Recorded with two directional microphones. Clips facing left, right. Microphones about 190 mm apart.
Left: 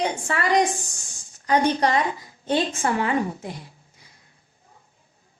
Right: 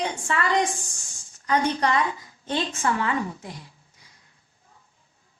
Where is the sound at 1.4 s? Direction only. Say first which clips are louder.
Left 3 dB; 30° left (ahead or behind).